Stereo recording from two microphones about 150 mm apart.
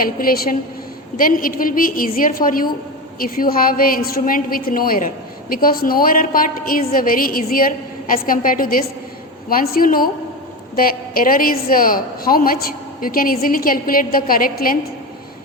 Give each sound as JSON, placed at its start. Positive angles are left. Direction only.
{"t": 0.0, "sound": "a woman's voice", "side_deg": 75}